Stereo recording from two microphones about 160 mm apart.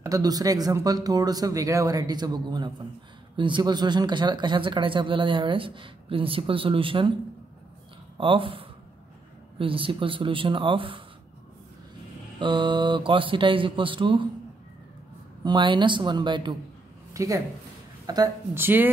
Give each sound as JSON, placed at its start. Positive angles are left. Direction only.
{"t": 0.0, "sound": "a man's voice", "side_deg": -25}
{"t": 8.2, "sound": "a man's voice", "side_deg": -35}
{"t": 12.4, "sound": "a man's voice", "side_deg": -30}
{"t": 15.4, "sound": "speech", "side_deg": -30}